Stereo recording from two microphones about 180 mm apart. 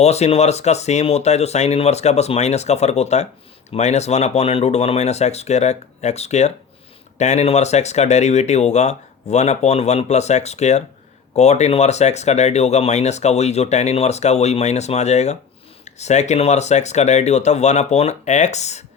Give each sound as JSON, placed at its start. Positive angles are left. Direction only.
{"t": 0.0, "sound": "speech", "side_deg": 35}